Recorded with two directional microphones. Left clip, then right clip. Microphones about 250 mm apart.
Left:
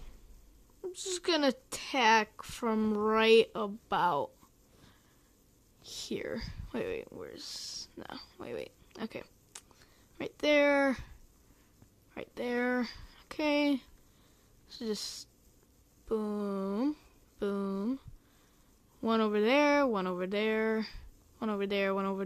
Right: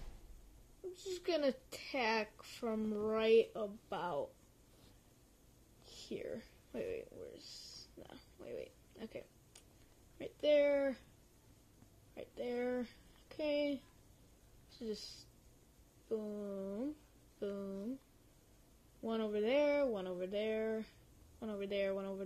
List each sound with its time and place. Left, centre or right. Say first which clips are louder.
1.0 s speech: left 7 dB; left
5.9 s speech: left 8 dB; left
12.1 s speech: left 7 dB; left
14.8 s speech: left 8 dB; left
16.1 s speech: left 8 dB; left
19.0 s speech: left 9 dB; left